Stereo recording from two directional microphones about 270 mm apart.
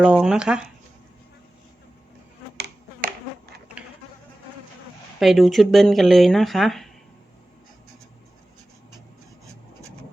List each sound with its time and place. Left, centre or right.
0.0 s speech: centre
3.0 s insect: right
5.2 s speech: centre